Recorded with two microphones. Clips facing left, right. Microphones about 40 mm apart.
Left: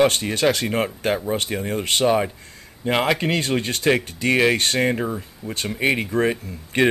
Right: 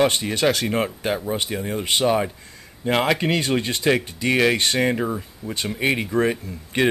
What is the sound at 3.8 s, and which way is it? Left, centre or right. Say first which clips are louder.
Speech: left 1 dB; centre.